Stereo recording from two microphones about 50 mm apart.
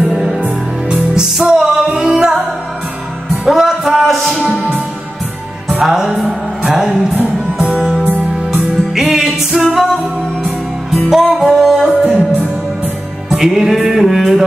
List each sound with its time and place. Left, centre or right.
0.1 s music: centre
3.4 s music: centre
5.7 s music: centre
7.5 s music: right
7.8 s music: centre
11.1 s music: centre
13.4 s music: centre